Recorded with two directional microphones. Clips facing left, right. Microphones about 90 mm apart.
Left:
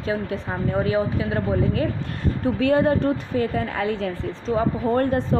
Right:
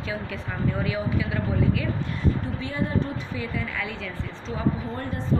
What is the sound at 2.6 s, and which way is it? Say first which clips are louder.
Speech: left 9 dB; 70° left (ahead or behind).